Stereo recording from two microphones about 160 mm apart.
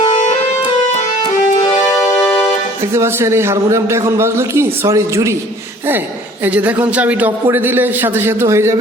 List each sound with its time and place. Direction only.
0.0 s music: 30° left (ahead or behind)
2.9 s a man's voice: 15° right (ahead or behind)
6.4 s a man's voice: 10° right (ahead or behind)